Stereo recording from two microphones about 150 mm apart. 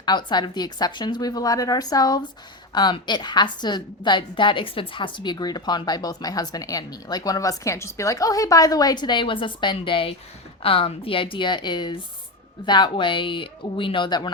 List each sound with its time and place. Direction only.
0.0 s a woman's voice: 30° left (ahead or behind)